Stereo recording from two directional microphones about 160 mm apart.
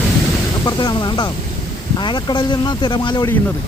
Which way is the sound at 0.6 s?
25° left (ahead or behind).